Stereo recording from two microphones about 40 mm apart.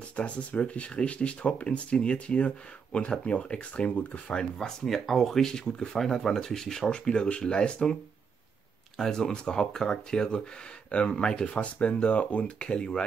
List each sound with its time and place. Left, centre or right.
0.1 s speech: left
4.4 s speech: centre
4.8 s speech: centre; by 13.0 s left